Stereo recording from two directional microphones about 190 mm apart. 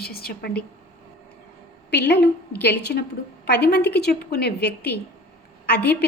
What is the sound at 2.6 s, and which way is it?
A woman's voice, 60° left (ahead or behind).